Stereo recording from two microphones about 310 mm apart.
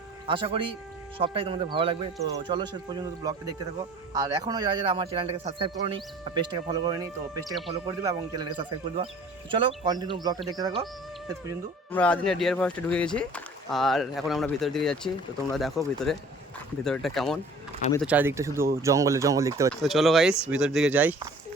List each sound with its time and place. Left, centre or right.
0.3 s a man's voice: centre
11.9 s a man's voice: centre